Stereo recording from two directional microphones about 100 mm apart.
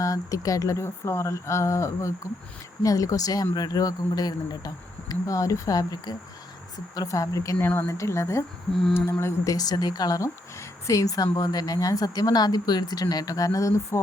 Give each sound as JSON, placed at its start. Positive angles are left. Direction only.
{"t": 0.0, "sound": "speech", "side_deg": 35}